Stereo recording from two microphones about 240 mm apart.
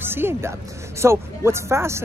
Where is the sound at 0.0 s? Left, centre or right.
Centre.